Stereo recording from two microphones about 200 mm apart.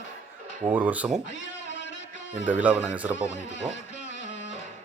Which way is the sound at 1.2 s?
65° left (ahead or behind).